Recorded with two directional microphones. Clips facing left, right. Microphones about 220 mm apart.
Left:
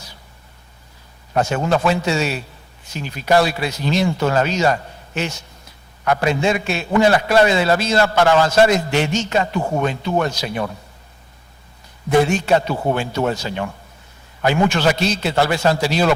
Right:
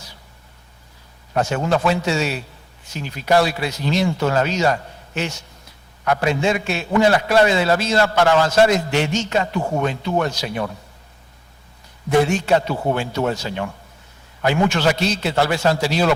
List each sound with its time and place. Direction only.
1.5 s a man's voice: 15° left (ahead or behind)
9.6 s speech: 30° left (ahead or behind)
10.3 s a man's voice: 15° left (ahead or behind)
12.2 s a man's voice: 10° left (ahead or behind)
12.7 s speech: 30° left (ahead or behind)
13.0 s a man's voice: 15° left (ahead or behind)